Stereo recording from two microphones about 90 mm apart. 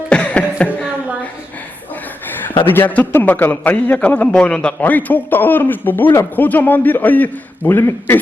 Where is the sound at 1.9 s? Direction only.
20° left (ahead or behind).